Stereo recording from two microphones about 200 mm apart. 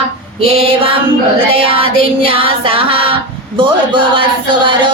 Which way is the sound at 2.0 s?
30° right (ahead or behind).